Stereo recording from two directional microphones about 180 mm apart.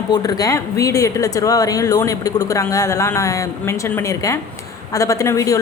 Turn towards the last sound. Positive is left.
turn(degrees=20)  # may be behind; listen again after turning